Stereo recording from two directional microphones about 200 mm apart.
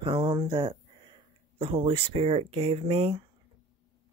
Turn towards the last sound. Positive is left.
turn(degrees=-30)  # may be behind; listen again after turning